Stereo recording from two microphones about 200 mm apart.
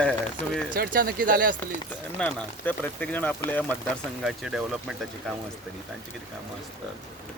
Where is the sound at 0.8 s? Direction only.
45° right (ahead or behind).